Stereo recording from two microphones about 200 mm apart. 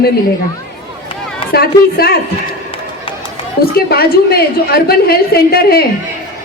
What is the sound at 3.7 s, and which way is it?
A woman's voice, 50° left (ahead or behind).